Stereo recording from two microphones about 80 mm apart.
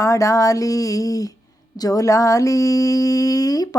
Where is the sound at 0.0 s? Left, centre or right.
Left.